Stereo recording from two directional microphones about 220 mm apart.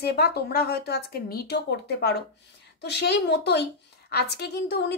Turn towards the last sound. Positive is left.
turn(degrees=50)  # may be behind; listen again after turning